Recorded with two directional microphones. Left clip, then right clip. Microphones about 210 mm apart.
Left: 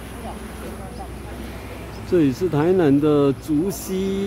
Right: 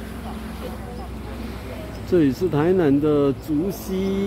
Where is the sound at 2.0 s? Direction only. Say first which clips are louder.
Even; 5° left (ahead or behind).